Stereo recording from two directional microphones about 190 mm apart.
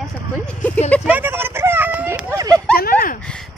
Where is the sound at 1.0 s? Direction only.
10° right (ahead or behind).